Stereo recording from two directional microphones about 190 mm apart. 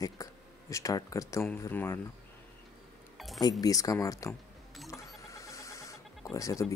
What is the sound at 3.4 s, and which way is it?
Speech, 20° left (ahead or behind).